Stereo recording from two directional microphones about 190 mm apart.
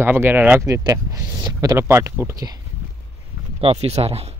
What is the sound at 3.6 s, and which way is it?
Speech, 30° right (ahead or behind).